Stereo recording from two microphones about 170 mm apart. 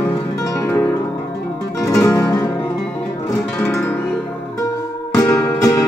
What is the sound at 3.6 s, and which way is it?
Music, 10° left (ahead or behind).